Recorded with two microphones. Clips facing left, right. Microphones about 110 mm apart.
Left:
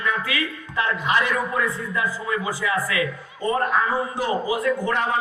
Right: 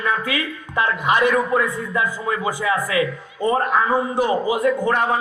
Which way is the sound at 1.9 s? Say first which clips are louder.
Right 3 dB; 25° right (ahead or behind).